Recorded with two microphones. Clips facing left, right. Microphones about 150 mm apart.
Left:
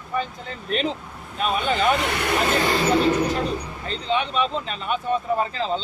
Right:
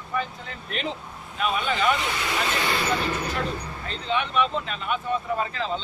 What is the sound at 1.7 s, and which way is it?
Speech, 50° left (ahead or behind).